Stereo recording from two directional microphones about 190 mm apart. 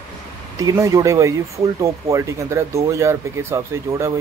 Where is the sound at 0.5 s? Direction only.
15° right (ahead or behind).